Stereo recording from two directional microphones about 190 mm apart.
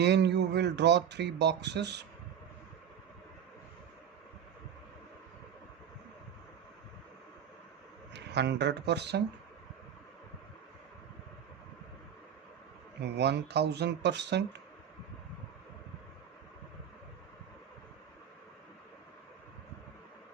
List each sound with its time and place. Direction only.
0.0 s speech: 65° right (ahead or behind)
8.1 s speech: 65° right (ahead or behind)
13.0 s speech: 60° right (ahead or behind)